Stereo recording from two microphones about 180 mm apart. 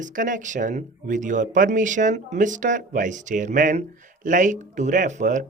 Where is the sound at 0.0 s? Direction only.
45° right (ahead or behind).